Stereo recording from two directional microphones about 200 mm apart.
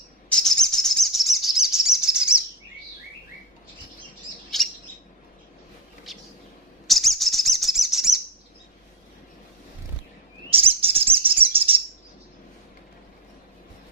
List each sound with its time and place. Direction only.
0.3 s bird: 5° left (ahead or behind)
6.1 s vehicle: centre (ahead or behind)
6.9 s bird: centre (ahead or behind)
10.5 s bird: 30° right (ahead or behind)